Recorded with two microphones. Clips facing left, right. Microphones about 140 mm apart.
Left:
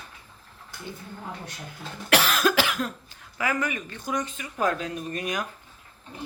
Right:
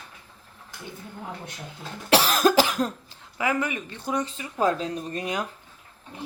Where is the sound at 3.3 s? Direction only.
20° right (ahead or behind).